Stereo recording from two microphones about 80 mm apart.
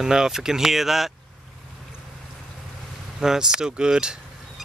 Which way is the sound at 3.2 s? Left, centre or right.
Centre.